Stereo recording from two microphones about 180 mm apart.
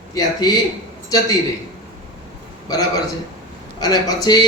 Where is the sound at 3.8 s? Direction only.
20° left (ahead or behind).